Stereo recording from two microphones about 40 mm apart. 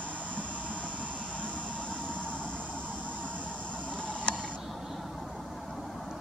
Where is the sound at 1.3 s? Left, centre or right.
Left.